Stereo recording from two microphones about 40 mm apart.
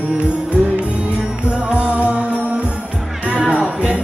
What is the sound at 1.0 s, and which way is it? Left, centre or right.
Music, right.